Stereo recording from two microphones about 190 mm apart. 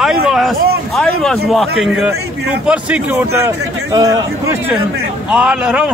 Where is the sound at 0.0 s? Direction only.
Centre (ahead or behind).